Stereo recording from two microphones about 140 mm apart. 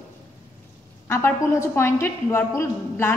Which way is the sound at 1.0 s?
15° left (ahead or behind).